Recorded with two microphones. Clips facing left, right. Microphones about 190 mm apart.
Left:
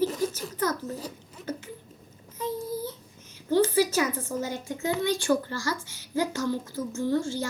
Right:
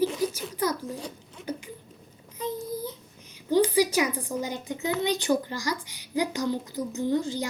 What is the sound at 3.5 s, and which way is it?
A child's voice, 15° right (ahead or behind).